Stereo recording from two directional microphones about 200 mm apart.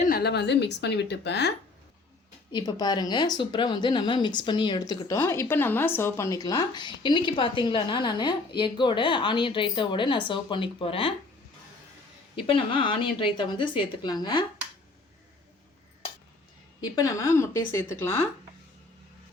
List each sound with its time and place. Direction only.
0.0 s a woman's voice: 50° left (ahead or behind)
2.5 s a woman's voice: 20° left (ahead or behind)
12.5 s a woman's voice: 25° left (ahead or behind)
16.8 s a woman's voice: 15° left (ahead or behind)